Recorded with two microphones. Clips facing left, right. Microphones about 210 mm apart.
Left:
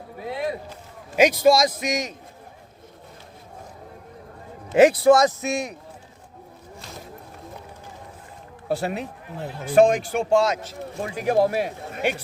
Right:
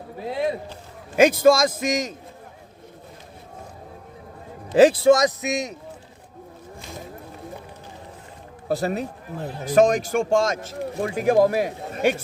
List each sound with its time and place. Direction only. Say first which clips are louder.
0.2 s a sound: right 3 dB; 30° right (ahead or behind)
1.1 s speech: right 1 dB; 50° right (ahead or behind)
4.7 s a man's voice: right 1 dB; 30° right (ahead or behind)
5.0 s a man's voice: even; 20° right (ahead or behind)
8.7 s speech: right 2 dB; 40° right (ahead or behind)